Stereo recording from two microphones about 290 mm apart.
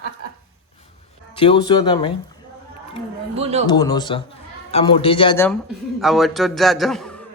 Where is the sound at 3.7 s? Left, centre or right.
Centre.